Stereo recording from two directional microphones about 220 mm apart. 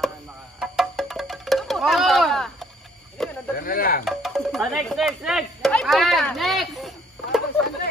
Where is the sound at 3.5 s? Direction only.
40° left (ahead or behind).